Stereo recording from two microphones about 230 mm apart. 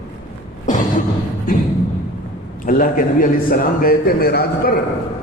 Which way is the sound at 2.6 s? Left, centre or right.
Left.